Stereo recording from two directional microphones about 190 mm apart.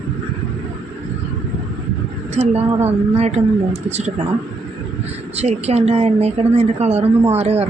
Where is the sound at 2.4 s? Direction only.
35° right (ahead or behind).